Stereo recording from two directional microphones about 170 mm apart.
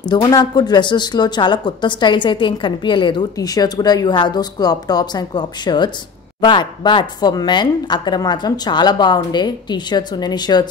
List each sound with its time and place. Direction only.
0.1 s a woman's voice: 25° left (ahead or behind)